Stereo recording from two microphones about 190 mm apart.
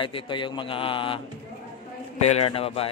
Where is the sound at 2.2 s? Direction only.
30° left (ahead or behind).